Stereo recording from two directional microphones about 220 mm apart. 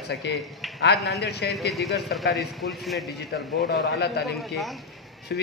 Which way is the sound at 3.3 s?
50° left (ahead or behind).